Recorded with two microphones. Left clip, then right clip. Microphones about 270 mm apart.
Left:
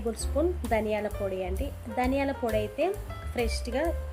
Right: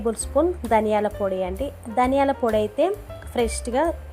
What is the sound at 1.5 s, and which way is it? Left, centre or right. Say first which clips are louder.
A woman's voice: right 7 dB; centre.